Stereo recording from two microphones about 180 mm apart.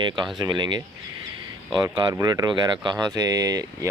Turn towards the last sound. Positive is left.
turn(degrees=-20)  # may be behind; listen again after turning